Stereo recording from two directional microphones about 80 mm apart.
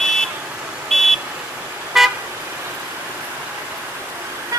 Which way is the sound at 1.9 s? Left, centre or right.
Centre.